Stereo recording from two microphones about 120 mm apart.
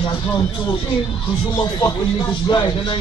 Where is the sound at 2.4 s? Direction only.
35° left (ahead or behind).